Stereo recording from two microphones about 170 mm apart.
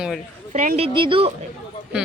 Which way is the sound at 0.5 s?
45° right (ahead or behind).